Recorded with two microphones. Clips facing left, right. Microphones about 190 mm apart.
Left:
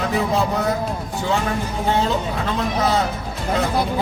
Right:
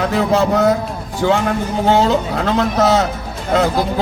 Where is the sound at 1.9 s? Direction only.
85° right.